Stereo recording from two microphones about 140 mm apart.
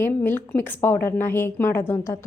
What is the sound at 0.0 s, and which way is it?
A woman's voice, 15° left (ahead or behind).